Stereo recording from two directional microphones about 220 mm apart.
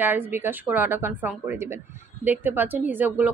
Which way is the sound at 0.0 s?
10° right (ahead or behind).